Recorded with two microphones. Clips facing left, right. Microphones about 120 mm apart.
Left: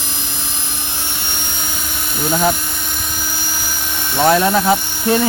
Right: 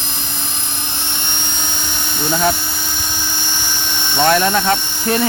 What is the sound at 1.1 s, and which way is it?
Helicopter, 5° left (ahead or behind).